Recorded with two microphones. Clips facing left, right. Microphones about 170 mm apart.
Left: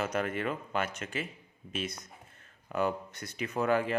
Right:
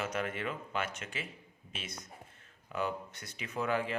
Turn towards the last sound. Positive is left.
turn(degrees=45)  # may be behind; listen again after turning